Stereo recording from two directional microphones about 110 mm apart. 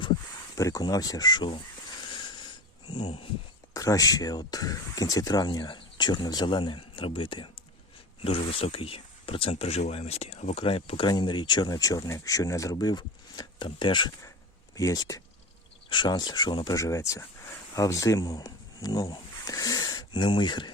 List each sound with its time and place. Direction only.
0.5 s speech: 30° left (ahead or behind)
2.9 s speech: 75° left (ahead or behind)
3.8 s speech: 30° left (ahead or behind); by 11.1 s 55° left (ahead or behind)
11.1 s speech: 45° left (ahead or behind)
14.8 s speech: 30° left (ahead or behind)
16.7 s speech: 30° left (ahead or behind)